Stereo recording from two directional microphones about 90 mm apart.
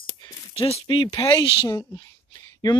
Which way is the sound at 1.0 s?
40° left (ahead or behind).